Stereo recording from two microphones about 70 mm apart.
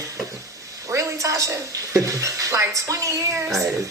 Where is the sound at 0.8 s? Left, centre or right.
Right.